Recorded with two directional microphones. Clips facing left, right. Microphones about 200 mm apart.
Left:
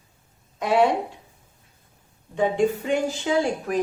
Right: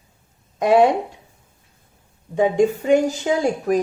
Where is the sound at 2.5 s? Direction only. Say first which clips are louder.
Right 8 dB; 45° right (ahead or behind).